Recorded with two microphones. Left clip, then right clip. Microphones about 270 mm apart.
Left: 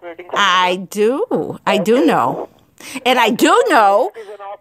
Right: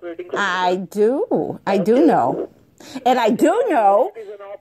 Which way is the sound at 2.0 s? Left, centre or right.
Left.